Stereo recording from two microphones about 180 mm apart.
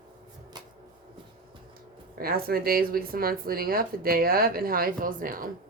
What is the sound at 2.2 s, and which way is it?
Speech, 55° right (ahead or behind).